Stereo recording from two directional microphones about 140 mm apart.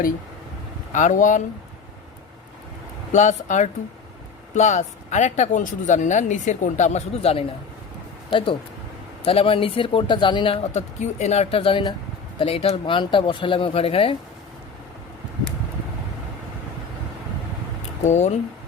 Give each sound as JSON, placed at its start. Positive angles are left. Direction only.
{"t": 0.9, "sound": "speech", "side_deg": 65}
{"t": 3.1, "sound": "speech", "side_deg": 60}
{"t": 18.0, "sound": "speech", "side_deg": 55}